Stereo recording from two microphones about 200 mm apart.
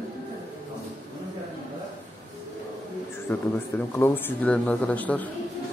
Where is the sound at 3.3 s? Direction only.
10° left (ahead or behind).